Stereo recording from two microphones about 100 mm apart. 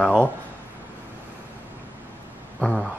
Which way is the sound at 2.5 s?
5° left (ahead or behind).